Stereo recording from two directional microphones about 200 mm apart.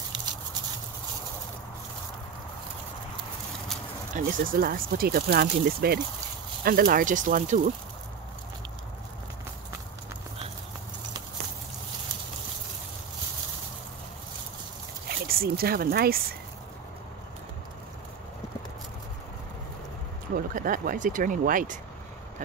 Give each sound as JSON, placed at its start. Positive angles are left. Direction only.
{"t": 4.1, "sound": "speech", "side_deg": -45}
{"t": 15.0, "sound": "speech", "side_deg": -50}
{"t": 20.3, "sound": "speech", "side_deg": -45}